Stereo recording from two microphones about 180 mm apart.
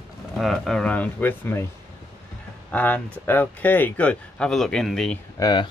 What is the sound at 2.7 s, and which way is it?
Speech, 10° left (ahead or behind).